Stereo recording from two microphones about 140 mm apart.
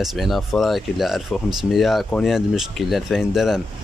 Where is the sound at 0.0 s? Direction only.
Centre (ahead or behind).